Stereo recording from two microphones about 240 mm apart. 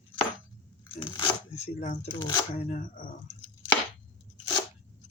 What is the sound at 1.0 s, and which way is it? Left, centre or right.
Shuffling cards, centre.